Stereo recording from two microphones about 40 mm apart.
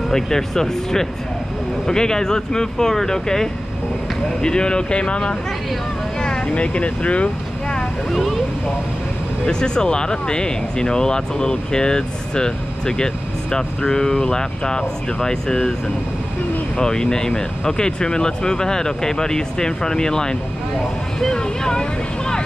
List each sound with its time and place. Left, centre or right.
0.1 s speech: centre; by 7.2 s left
9.5 s speech: centre
16.7 s speech: centre
21.4 s vehicle: centre